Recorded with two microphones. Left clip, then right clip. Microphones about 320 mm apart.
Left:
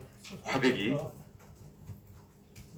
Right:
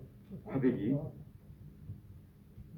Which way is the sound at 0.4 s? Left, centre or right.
Centre.